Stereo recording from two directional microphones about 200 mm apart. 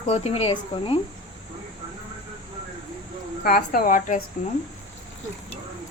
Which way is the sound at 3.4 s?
50° left (ahead or behind).